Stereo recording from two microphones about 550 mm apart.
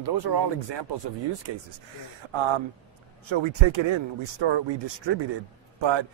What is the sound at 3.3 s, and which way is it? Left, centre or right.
A man's voice, right.